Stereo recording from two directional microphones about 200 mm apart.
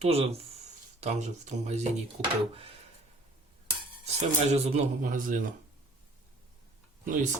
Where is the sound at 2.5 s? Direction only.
30° right (ahead or behind).